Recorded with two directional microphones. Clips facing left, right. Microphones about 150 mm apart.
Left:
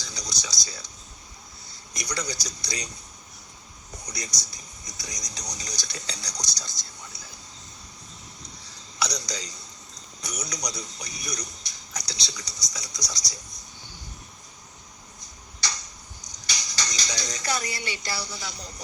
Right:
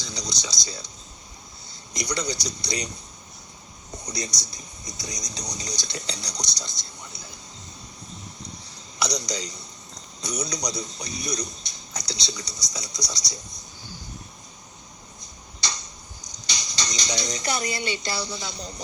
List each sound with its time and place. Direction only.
0.0 s a sound: 20° right (ahead or behind)
1.9 s speech: 20° right (ahead or behind)
3.9 s speech: 20° right (ahead or behind)
9.1 s speech: 20° right (ahead or behind)
16.5 s speech: 20° right (ahead or behind)